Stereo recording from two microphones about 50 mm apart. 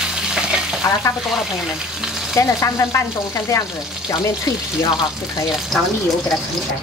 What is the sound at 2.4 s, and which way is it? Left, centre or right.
Speech, left.